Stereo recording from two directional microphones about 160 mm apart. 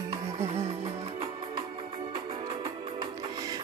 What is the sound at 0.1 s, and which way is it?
Music, 40° right (ahead or behind).